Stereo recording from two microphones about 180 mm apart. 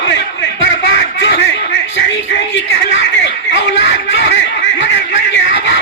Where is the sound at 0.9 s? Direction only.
80° left.